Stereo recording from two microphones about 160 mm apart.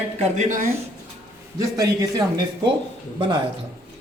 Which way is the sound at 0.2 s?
50° right (ahead or behind).